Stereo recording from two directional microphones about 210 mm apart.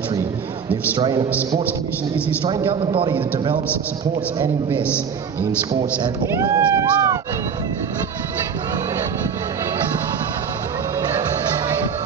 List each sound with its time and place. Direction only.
0.9 s a man's voice: 20° right (ahead or behind)
6.0 s speech: 15° right (ahead or behind)